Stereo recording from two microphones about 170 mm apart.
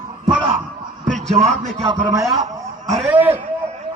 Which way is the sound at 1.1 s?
45° right (ahead or behind).